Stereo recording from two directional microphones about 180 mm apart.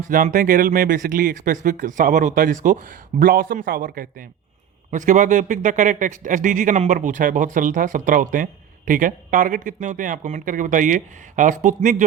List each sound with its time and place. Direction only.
0.1 s a man's voice: 50° right (ahead or behind)